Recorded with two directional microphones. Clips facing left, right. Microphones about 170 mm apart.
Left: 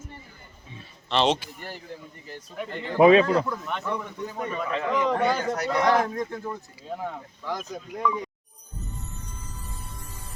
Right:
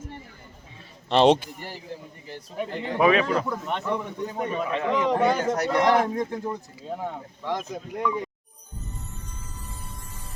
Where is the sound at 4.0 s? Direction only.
20° right (ahead or behind).